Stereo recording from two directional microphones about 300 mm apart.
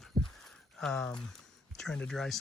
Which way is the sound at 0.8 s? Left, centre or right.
Centre.